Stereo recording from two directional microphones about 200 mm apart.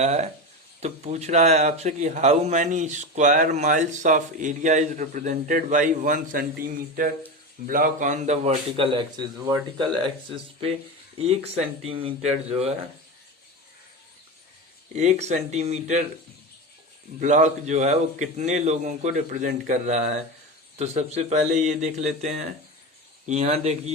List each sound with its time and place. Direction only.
0.0 s a man's voice: 35° right (ahead or behind)
14.9 s speech: 35° right (ahead or behind)
17.2 s speech: 35° right (ahead or behind)